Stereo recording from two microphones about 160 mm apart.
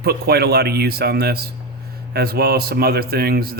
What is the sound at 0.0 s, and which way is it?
Speech, 80° right.